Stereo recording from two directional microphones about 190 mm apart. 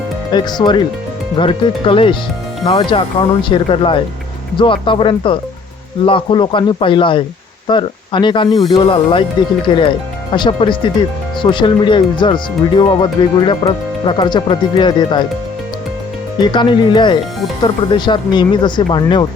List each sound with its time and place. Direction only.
0.3 s speech: 25° left (ahead or behind)
16.4 s speech: 25° left (ahead or behind)